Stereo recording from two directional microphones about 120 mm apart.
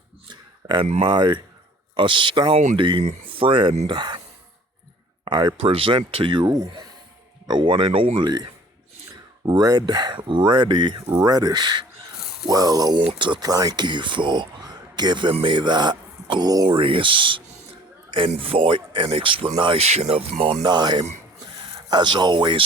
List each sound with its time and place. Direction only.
0.3 s a sound: 40° right (ahead or behind)
1.0 s speech: 40° right (ahead or behind)
5.2 s speech: 40° right (ahead or behind)
9.5 s speech: 35° right (ahead or behind)
16.7 s speech: 45° right (ahead or behind)
19.8 s speech: 60° right (ahead or behind)
20.6 s speech: 40° right (ahead or behind)